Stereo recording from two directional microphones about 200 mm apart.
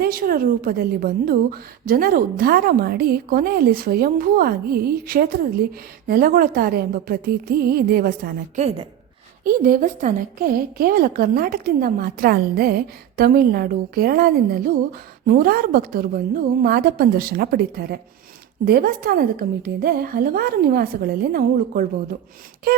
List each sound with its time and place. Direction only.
0.0 s a woman's voice: 45° right (ahead or behind)